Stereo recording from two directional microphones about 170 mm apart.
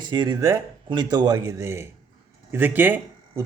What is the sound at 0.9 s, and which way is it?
Speech, 25° right (ahead or behind).